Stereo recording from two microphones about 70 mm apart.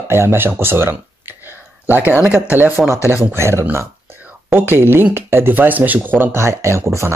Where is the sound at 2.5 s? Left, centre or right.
Right.